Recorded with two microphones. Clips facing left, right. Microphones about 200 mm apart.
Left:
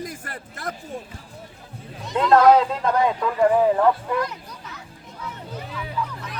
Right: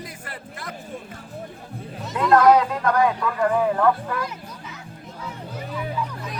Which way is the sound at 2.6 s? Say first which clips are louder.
Even; 25° left (ahead or behind).